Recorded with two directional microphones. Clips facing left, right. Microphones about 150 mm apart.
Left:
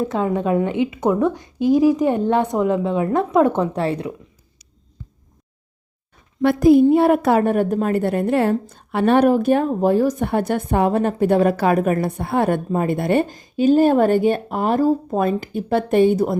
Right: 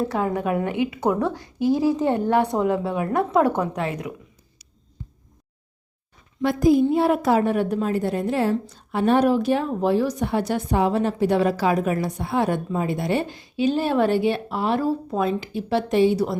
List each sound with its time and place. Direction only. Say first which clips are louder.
0.0 s a woman's voice: left 3 dB; 20° left (ahead or behind)
6.4 s a child's voice: left 5 dB; 65° left (ahead or behind)